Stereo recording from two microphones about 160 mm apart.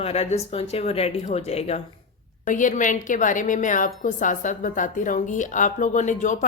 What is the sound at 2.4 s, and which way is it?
A woman's voice, 55° left (ahead or behind).